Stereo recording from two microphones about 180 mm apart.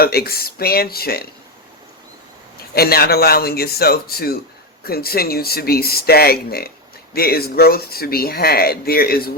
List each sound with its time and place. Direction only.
0.0 s speech: 55° left (ahead or behind)
2.7 s speech: 60° left (ahead or behind)